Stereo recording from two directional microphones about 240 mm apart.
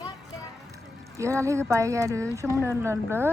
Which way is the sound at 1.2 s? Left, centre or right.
Centre.